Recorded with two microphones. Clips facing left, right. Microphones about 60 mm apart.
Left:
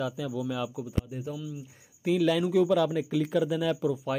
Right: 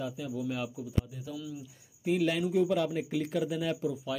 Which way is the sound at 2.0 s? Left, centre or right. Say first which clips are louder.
Left 4 dB; left.